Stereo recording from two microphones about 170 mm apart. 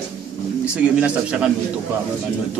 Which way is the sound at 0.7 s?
5° right (ahead or behind).